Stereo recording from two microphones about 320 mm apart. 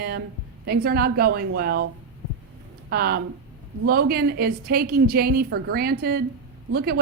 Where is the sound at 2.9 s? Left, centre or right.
Right.